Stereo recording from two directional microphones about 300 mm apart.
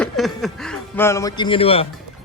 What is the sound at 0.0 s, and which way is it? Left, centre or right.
Speech, centre.